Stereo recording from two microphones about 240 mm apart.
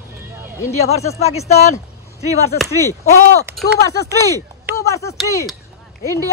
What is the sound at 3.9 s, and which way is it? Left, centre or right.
Speech, centre.